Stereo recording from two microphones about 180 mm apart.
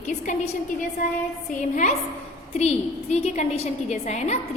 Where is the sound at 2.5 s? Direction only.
35° left (ahead or behind).